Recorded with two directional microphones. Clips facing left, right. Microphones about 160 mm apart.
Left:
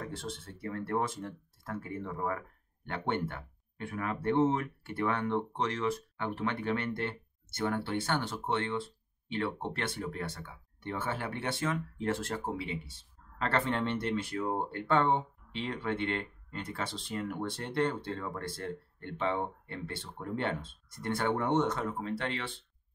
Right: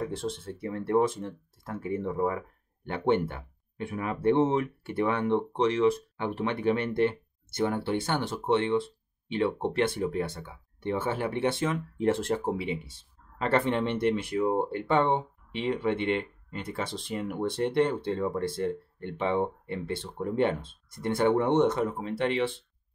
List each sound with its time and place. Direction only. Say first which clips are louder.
0.0 s speech: right 8 dB; 20° right (ahead or behind)